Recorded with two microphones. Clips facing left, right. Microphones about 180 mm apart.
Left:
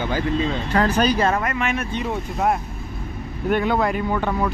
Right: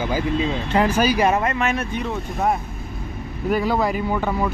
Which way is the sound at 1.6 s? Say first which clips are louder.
Right 2 dB; 40° right (ahead or behind).